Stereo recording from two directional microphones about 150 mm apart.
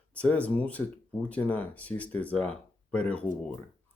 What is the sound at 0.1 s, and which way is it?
Speech, 10° left (ahead or behind).